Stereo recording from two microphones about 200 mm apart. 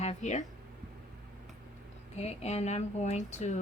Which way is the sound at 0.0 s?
35° left (ahead or behind).